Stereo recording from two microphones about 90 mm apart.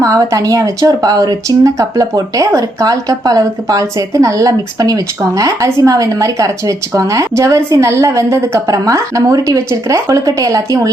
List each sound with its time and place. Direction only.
0.0 s speech: 40° right (ahead or behind)